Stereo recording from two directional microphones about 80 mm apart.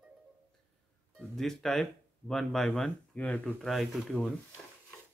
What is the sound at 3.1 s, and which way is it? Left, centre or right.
Speech, centre.